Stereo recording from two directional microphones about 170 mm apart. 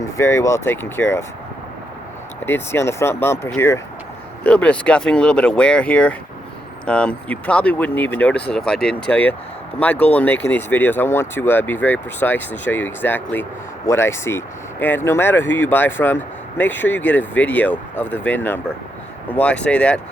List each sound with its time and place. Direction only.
0.2 s speech: 15° left (ahead or behind)
2.5 s speech: 15° left (ahead or behind)